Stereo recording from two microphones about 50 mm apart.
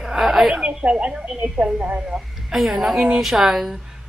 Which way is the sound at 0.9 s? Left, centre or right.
Right.